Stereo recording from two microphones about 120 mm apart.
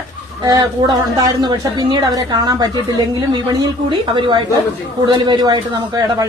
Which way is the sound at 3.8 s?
45° right (ahead or behind).